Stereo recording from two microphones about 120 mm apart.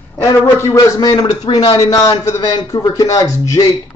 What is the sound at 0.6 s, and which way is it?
A man's voice, 30° left (ahead or behind).